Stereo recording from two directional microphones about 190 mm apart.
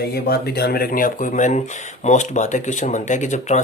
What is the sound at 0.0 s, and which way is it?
Speech, 55° left (ahead or behind).